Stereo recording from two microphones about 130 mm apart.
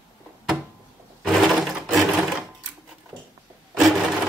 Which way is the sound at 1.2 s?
Centre (ahead or behind).